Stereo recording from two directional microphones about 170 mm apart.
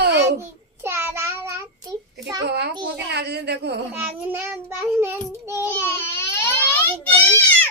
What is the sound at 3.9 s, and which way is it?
Child singing, 10° right (ahead or behind).